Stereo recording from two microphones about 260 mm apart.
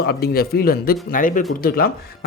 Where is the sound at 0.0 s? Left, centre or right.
Left.